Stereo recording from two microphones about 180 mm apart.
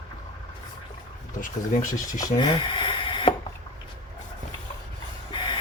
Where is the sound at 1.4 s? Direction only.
45° left (ahead or behind).